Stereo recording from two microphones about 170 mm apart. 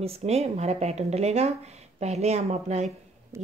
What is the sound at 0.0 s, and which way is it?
Speech, 35° right (ahead or behind).